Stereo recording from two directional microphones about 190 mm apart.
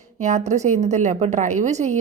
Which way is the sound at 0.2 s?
40° right (ahead or behind).